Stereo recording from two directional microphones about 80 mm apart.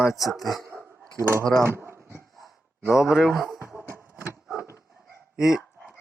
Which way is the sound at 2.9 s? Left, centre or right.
Centre.